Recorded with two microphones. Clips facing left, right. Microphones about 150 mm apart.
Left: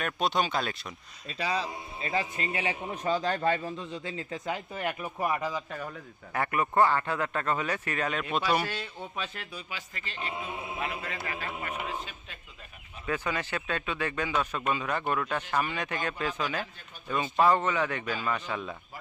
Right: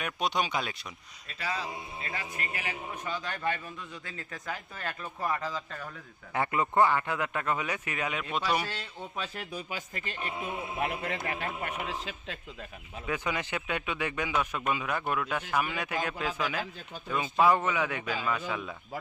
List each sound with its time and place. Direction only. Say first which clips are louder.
0.0 s a man's voice: left 2 dB; 10° right (ahead or behind)
1.3 s a man's voice: left 4 dB; 20° left (ahead or behind)
6.3 s a man's voice: even; 20° right (ahead or behind)
8.6 s a man's voice: left 3 dB; 10° left (ahead or behind)
9.5 s a man's voice: right 4 dB; 45° right (ahead or behind)
11.2 s a man's voice: right 2 dB; 25° right (ahead or behind)
11.9 s speech: right 1 dB; 90° right
13.1 s a man's voice: left 1 dB; 15° right (ahead or behind)